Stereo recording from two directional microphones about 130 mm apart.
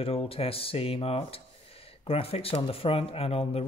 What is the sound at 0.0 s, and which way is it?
Speech, 50° left (ahead or behind).